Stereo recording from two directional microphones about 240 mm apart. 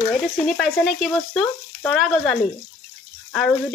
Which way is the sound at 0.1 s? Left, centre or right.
Centre.